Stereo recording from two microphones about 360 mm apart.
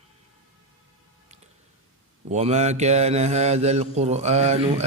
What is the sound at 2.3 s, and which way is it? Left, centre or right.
Mantra, centre.